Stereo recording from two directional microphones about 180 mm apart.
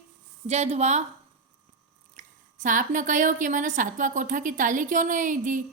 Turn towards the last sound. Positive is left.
turn(degrees=-45)  # may be behind; listen again after turning